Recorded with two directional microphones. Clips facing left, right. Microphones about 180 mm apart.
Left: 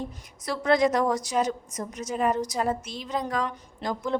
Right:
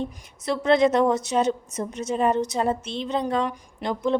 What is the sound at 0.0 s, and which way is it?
Speech, 25° right (ahead or behind).